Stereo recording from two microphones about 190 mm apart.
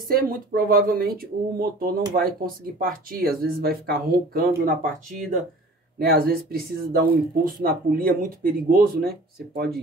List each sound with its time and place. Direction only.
0.1 s speech: 50° right (ahead or behind)
5.9 s speech: 55° right (ahead or behind)